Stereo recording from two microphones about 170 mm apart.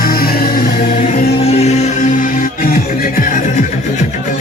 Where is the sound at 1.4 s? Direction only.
40° left (ahead or behind); by 3.3 s 55° left (ahead or behind).